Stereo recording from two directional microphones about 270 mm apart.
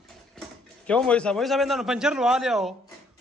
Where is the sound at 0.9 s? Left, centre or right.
Centre.